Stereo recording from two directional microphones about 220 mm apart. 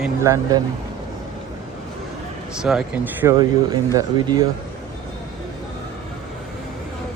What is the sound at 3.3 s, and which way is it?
Speech, 20° right (ahead or behind).